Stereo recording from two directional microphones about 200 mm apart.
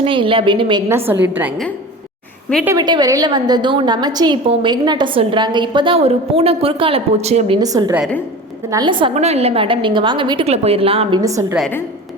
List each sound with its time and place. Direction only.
0.0 s a woman's voice: 25° right (ahead or behind)
0.9 s a woman's voice: 10° right (ahead or behind)
2.6 s a woman's voice: 20° right (ahead or behind)
7.6 s a woman's voice: 20° right (ahead or behind)
11.2 s a woman's voice: 15° right (ahead or behind)